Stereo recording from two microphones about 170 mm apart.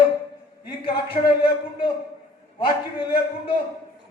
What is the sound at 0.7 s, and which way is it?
Speech, 30° left (ahead or behind).